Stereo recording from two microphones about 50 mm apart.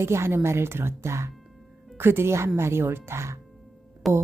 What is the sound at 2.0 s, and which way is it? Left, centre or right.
A woman's voice, right.